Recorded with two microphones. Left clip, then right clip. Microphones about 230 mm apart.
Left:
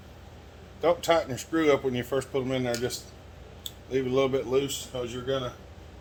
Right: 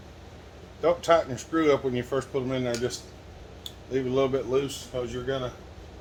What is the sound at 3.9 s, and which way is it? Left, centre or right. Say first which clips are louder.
Speech: even; left.